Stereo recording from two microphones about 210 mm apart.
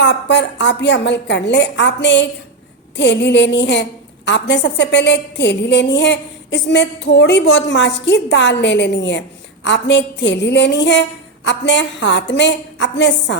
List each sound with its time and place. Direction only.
0.0 s a woman's voice: 55° left (ahead or behind)